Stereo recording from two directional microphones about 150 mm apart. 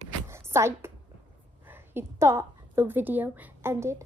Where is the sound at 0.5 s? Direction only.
15° right (ahead or behind).